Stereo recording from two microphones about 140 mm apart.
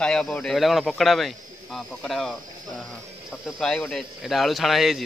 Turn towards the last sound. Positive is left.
turn(degrees=0)  # may be behind; listen again after turning